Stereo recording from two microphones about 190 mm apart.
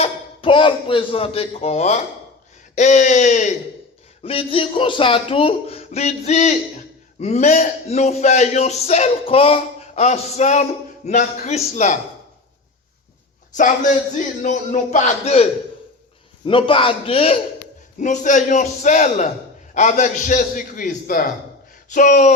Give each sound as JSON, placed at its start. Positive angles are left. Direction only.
{"t": 0.0, "sound": "a man's voice", "side_deg": 25}
{"t": 14.4, "sound": "a man's voice", "side_deg": 40}
{"t": 16.5, "sound": "speech", "side_deg": 25}
{"t": 18.0, "sound": "a man's voice", "side_deg": 40}